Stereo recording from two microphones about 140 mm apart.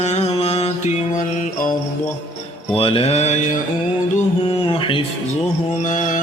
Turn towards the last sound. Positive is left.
turn(degrees=65)  # may be behind; listen again after turning